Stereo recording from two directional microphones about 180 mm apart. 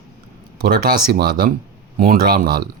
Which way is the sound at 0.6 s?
55° right (ahead or behind).